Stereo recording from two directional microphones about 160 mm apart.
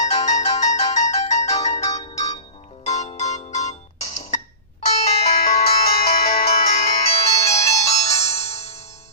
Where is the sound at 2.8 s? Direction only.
45° left (ahead or behind).